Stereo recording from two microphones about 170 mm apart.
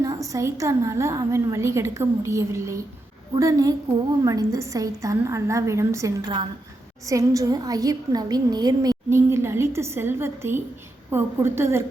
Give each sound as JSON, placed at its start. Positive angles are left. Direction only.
{"t": 0.0, "sound": "a woman's voice", "side_deg": -20}